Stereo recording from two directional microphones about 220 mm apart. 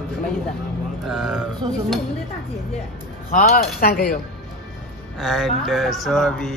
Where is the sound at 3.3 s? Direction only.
40° left (ahead or behind).